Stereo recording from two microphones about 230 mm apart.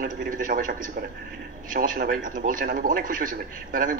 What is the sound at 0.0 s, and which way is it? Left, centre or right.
A man's voice, right.